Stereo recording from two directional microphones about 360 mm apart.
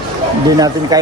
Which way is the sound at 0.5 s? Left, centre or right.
Centre.